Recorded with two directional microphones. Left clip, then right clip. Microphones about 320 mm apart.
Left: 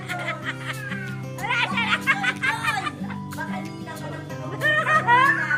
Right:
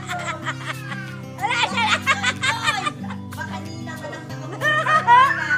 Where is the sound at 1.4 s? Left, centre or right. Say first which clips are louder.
Right 3 dB; centre.